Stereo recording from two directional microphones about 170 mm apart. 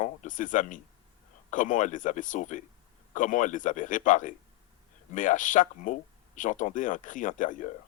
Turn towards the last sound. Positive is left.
turn(degrees=50)  # may be behind; listen again after turning